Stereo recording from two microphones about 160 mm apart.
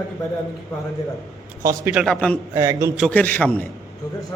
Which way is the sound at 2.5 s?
20° right (ahead or behind).